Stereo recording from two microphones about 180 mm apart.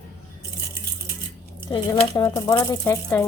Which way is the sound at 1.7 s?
20° left (ahead or behind).